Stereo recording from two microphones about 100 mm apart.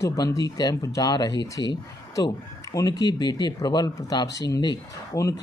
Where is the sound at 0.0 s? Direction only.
30° left (ahead or behind).